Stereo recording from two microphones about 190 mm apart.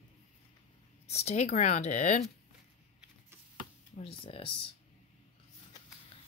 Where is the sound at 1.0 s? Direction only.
35° left (ahead or behind).